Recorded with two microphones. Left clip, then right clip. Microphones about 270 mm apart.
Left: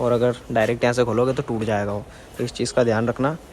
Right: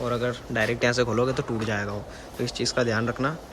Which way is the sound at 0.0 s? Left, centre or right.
Centre.